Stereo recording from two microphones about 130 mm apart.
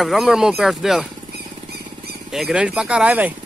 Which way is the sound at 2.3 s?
5° right (ahead or behind).